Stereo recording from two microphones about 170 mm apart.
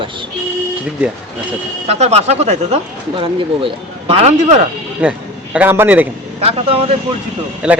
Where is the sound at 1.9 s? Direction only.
40° right (ahead or behind).